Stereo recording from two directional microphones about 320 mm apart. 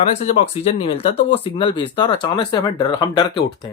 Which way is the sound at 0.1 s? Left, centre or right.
Centre.